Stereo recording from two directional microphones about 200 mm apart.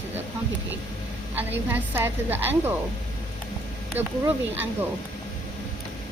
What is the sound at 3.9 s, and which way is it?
Speech, 10° right (ahead or behind).